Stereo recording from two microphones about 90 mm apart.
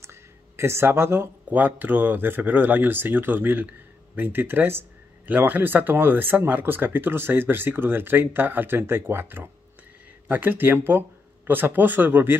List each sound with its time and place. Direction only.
0.0 s speech: 30° right (ahead or behind)